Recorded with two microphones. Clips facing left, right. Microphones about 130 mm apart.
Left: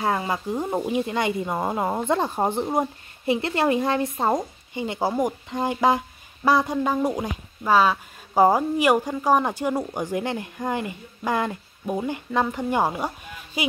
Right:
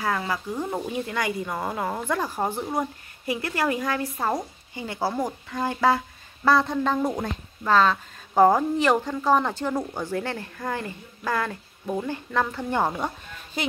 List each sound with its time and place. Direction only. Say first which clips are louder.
0.0 s speech: left 3 dB; 25° left (ahead or behind); by 13.7 s 10° left (ahead or behind)